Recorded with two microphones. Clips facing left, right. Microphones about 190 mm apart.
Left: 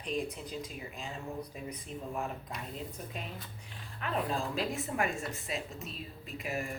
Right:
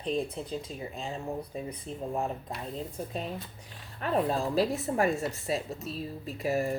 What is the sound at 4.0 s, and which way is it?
Speech, 35° right (ahead or behind).